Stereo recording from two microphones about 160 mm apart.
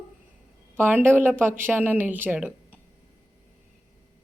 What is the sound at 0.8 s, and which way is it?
Speech, 15° right (ahead or behind).